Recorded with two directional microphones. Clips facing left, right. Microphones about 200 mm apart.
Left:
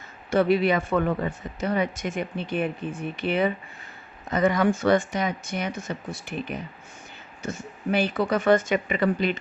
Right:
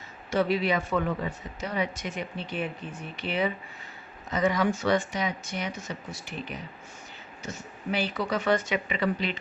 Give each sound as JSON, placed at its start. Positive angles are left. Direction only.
{"t": 0.3, "sound": "speech", "side_deg": 55}